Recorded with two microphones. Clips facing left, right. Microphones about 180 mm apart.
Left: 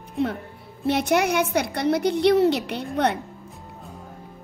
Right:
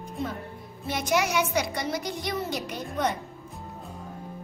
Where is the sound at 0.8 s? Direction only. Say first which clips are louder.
Left 6 dB; 65° left (ahead or behind).